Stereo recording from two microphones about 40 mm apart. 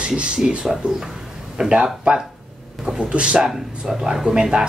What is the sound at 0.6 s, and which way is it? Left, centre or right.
Speech, centre.